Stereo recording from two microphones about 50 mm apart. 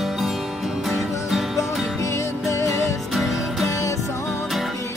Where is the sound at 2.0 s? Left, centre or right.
Left.